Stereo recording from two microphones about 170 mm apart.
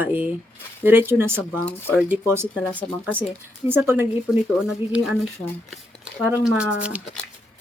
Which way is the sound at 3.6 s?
15° right (ahead or behind).